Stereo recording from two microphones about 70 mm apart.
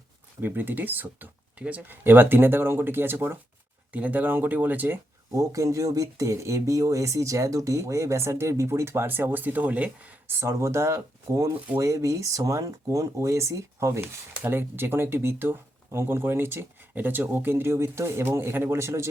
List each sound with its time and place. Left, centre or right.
0.4 s speech: right
3.9 s speech: right
5.3 s speech: right
10.2 s speech: right
14.0 s speech: right